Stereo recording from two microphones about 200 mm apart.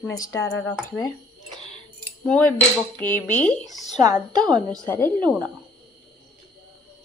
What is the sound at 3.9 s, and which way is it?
Speech, 20° right (ahead or behind).